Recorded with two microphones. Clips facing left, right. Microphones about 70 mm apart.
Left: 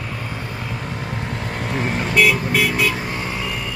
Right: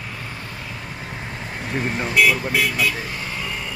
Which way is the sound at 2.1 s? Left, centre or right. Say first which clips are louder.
Left 1 dB; centre.